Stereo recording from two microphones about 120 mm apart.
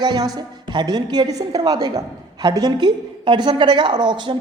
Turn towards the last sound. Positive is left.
turn(degrees=-40)  # may be behind; listen again after turning